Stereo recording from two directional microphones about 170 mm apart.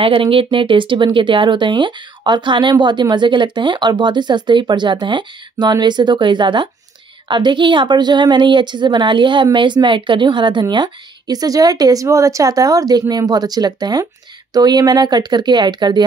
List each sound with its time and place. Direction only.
0.0 s a woman's voice: 30° right (ahead or behind)